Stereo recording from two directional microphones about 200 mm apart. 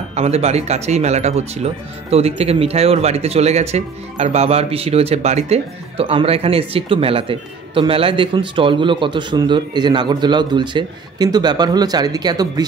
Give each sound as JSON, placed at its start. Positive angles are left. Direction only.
{"t": 0.1, "sound": "speech", "side_deg": -30}